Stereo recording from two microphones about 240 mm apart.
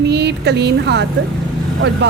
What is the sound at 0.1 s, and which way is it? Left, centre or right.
A woman's voice, right.